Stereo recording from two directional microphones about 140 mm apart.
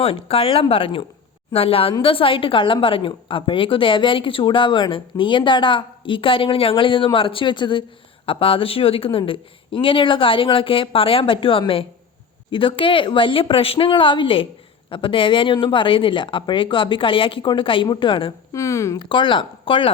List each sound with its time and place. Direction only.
0.0 s a woman's voice: 45° left (ahead or behind)
18.5 s speech: 20° left (ahead or behind)
19.0 s a woman's voice: 35° left (ahead or behind)